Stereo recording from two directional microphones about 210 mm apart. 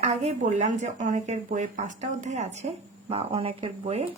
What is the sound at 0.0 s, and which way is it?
Speech, 30° right (ahead or behind).